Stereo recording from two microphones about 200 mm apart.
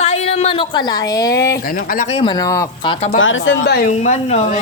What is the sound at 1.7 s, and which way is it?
Speech, 45° left (ahead or behind).